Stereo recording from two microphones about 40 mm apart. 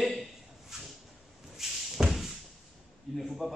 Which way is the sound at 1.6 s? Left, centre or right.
Centre.